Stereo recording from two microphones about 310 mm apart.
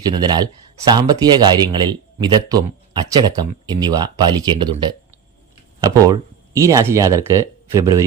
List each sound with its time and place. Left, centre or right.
0.0 s speech: centre